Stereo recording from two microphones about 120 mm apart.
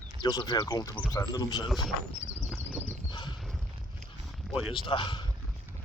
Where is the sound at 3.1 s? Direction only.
40° left (ahead or behind).